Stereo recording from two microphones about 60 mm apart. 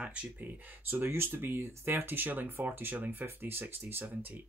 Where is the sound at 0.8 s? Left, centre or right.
Right.